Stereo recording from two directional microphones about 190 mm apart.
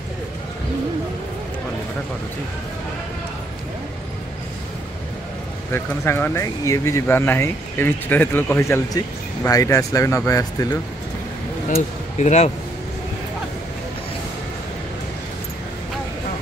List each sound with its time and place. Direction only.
5.7 s speech: 10° left (ahead or behind)
11.7 s speech: 35° left (ahead or behind)